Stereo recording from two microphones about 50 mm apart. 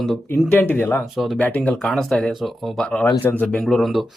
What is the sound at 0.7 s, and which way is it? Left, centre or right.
Speech, left.